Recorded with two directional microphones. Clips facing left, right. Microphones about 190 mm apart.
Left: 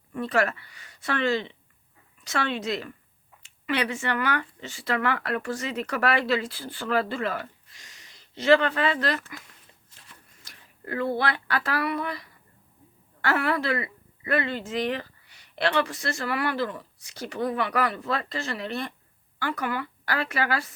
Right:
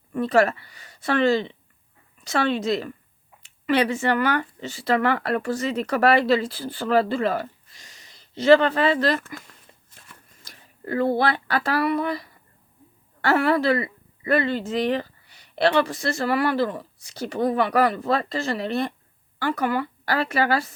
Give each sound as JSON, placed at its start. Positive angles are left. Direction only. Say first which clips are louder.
{"t": 0.1, "sound": "speech", "louder": "right 6 dB", "side_deg": -35}
{"t": 10.0, "sound": "a sound", "louder": "right 5 dB", "side_deg": -50}
{"t": 10.4, "sound": "speech", "louder": "right 6 dB", "side_deg": -35}
{"t": 13.2, "sound": "speech", "louder": "right 6 dB", "side_deg": -35}